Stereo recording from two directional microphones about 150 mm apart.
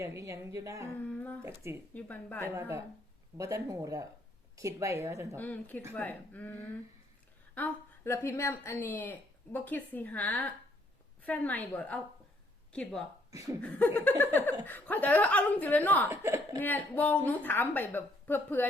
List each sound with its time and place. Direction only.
0.0 s a woman's voice: 20° right (ahead or behind)
1.9 s speech: 10° left (ahead or behind)
2.6 s a woman's voice: 15° right (ahead or behind)
5.4 s speech: 10° left (ahead or behind)
13.3 s a woman's voice: 20° right (ahead or behind)
13.6 s speech: 10° left (ahead or behind)
16.0 s speech: 15° right (ahead or behind)
16.6 s speech: 10° left (ahead or behind)